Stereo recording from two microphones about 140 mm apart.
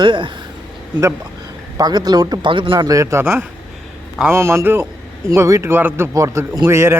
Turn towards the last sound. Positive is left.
turn(degrees=-20)  # may be behind; listen again after turning